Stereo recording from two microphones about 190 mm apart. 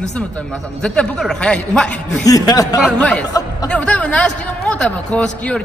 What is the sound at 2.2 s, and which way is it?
Speech, 20° left (ahead or behind).